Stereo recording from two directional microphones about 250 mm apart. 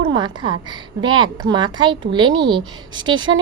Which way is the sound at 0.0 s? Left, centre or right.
Centre.